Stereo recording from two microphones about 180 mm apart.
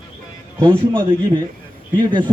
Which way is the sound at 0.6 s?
30° right (ahead or behind).